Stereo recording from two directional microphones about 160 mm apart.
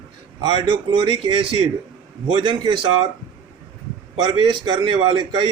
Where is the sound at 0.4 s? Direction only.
25° right (ahead or behind).